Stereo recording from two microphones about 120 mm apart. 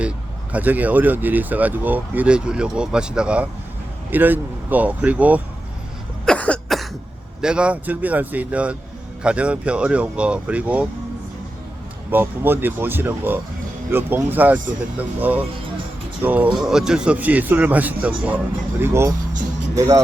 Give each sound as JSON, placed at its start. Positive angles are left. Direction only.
{"t": 0.5, "sound": "speech", "side_deg": -15}
{"t": 6.2, "sound": "cough", "side_deg": 10}
{"t": 7.4, "sound": "speech", "side_deg": -10}
{"t": 12.1, "sound": "speech", "side_deg": -15}